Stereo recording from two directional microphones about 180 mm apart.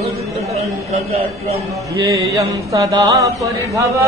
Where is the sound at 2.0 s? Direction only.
20° right (ahead or behind).